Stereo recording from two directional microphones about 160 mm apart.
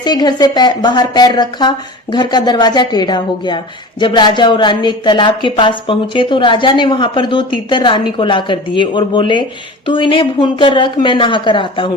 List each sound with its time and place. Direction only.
0.0 s a woman's voice: 25° left (ahead or behind)